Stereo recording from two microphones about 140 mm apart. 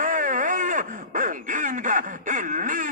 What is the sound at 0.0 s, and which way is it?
Speech, 65° right (ahead or behind).